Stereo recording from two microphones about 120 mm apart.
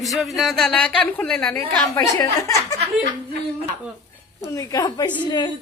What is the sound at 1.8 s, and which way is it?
Speech, 25° left (ahead or behind).